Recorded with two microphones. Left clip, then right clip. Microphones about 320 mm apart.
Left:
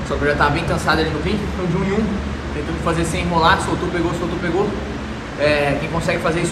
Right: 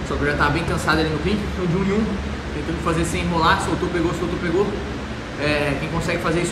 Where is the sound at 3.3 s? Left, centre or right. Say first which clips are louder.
Left 3 dB; centre.